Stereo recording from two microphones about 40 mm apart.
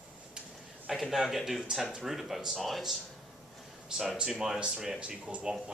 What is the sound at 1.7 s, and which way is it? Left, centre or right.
Speech, centre.